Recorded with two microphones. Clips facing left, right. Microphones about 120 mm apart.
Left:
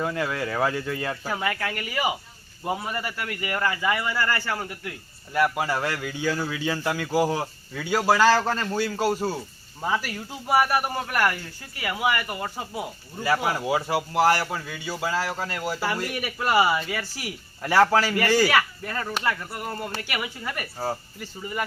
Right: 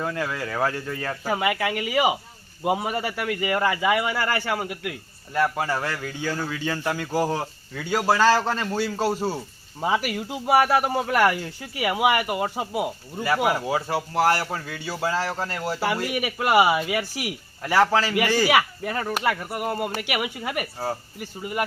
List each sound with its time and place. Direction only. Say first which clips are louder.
0.0 s speech: left 1 dB; 15° left (ahead or behind)
1.6 s speech: right 5 dB; 20° right (ahead or behind)
5.5 s speech: even; 10° left (ahead or behind)
9.8 s speech: right 3 dB; 15° right (ahead or behind)
13.6 s a man's voice: left 1 dB; 10° left (ahead or behind); by 21.6 s 10° right (ahead or behind)